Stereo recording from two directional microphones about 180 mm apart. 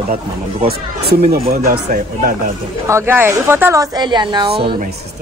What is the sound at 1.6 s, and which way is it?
Speech, 50° right (ahead or behind).